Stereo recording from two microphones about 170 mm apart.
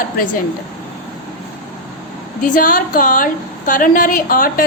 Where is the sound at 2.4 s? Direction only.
50° left (ahead or behind).